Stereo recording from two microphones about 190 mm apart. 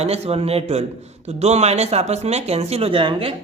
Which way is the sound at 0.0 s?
35° right (ahead or behind).